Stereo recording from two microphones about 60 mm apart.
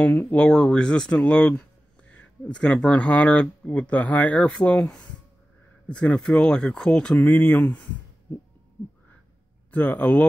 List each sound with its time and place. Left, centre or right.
0.1 s speech: left
0.4 s speech: centre
9.7 s speech: left